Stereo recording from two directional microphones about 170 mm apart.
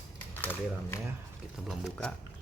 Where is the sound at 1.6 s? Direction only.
Centre (ahead or behind).